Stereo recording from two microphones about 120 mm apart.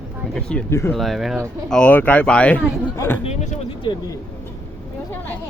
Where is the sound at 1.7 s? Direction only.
10° left (ahead or behind).